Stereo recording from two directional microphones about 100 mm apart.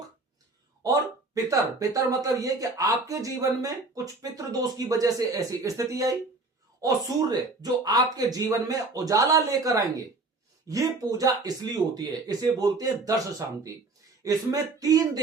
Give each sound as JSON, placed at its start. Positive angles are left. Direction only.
{"t": 0.8, "sound": "speech", "side_deg": -35}
{"t": 14.3, "sound": "speech", "side_deg": -40}